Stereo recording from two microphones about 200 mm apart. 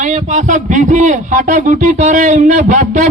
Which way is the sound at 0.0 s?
35° right (ahead or behind).